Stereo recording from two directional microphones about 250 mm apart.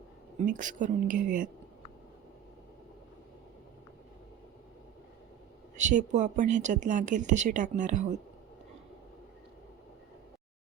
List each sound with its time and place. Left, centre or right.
0.3 s speech: right
5.7 s speech: right